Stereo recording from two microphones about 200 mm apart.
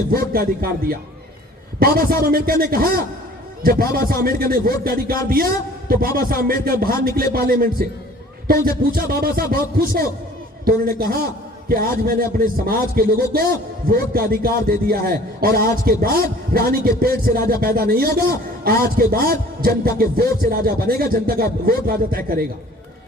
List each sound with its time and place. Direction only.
0.3 s a man's voice: 50° right (ahead or behind)